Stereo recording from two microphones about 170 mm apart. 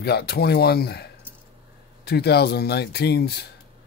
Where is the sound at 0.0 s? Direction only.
70° left (ahead or behind).